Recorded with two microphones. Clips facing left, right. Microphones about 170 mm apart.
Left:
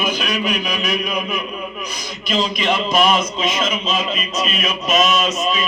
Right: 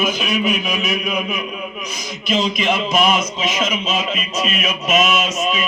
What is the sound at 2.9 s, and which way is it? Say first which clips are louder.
Mantra: left 1 dB; 5° right (ahead or behind).